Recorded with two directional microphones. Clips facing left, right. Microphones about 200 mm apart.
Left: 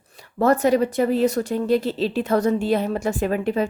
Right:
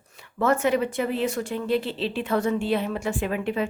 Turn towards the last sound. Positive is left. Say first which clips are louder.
# left 4 dB
turn(degrees=40)  # may be behind; listen again after turning